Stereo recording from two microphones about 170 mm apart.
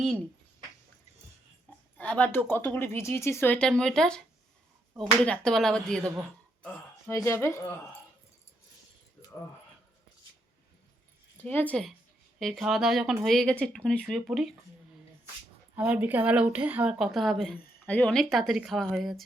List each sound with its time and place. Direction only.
2.0 s speech: 10° left (ahead or behind)
6.0 s speech: 20° right (ahead or behind)
7.1 s speech: 15° left (ahead or behind)
11.4 s speech: 10° left (ahead or behind)
15.7 s speech: 10° right (ahead or behind)